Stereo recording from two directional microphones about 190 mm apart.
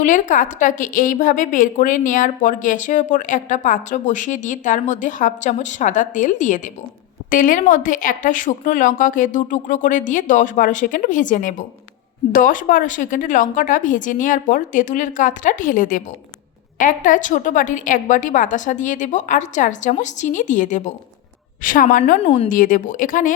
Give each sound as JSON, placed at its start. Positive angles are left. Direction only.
{"t": 0.0, "sound": "a woman's voice", "side_deg": 45}